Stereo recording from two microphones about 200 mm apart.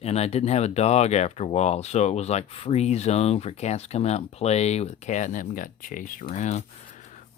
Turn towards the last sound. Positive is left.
turn(degrees=35)  # may be behind; listen again after turning